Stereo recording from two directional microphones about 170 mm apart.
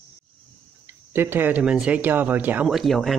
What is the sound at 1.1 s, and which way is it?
Speech, 15° right (ahead or behind).